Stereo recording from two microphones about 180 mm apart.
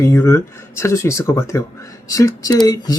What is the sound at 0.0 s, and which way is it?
Speech, 15° left (ahead or behind).